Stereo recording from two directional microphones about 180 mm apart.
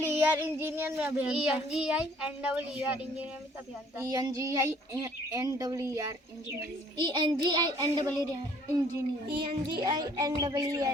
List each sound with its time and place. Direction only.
0.0 s child singing: 15° right (ahead or behind)
3.9 s child singing: 20° right (ahead or behind)
9.3 s child singing: 25° right (ahead or behind)